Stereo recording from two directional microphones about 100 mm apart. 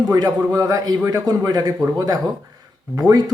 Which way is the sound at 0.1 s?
35° right (ahead or behind).